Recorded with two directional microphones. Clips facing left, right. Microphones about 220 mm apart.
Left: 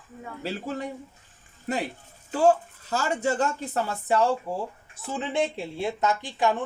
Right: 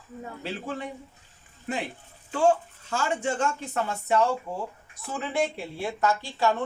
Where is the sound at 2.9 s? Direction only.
35° left (ahead or behind); by 6.5 s 15° left (ahead or behind).